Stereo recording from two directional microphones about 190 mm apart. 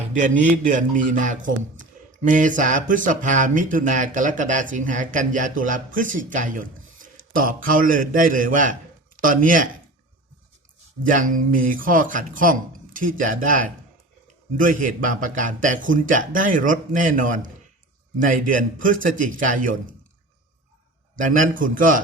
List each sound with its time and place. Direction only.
0.1 s speech: 40° right (ahead or behind)
11.0 s speech: 45° right (ahead or behind)
21.2 s speech: 45° right (ahead or behind)